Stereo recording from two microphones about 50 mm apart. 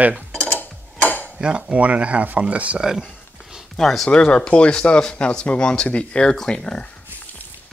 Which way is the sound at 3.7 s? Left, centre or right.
Centre.